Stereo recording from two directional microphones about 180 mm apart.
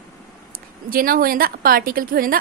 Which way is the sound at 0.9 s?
55° right (ahead or behind).